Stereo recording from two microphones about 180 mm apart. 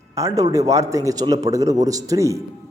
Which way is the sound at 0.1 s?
20° right (ahead or behind).